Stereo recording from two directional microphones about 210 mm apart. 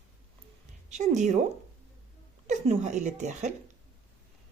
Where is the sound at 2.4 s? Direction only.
30° right (ahead or behind).